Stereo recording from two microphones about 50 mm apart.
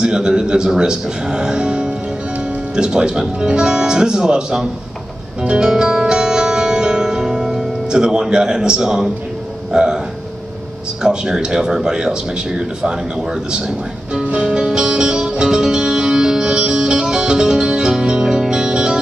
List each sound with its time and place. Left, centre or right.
0.0 s speech: centre
5.4 s music: centre
9.7 s speech: centre
11.0 s a sound: centre